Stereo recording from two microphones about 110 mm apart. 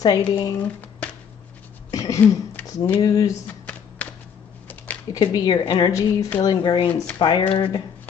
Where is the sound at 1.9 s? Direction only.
30° left (ahead or behind).